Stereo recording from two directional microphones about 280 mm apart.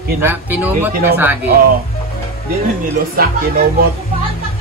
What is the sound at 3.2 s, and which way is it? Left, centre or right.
Speech, right.